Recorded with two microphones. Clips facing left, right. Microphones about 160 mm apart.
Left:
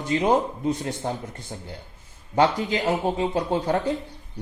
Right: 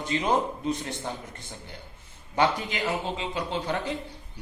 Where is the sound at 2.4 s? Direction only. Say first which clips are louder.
Left 4 dB; 45° left (ahead or behind).